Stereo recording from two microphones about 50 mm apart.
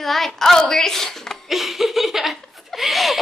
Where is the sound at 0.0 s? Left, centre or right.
Centre.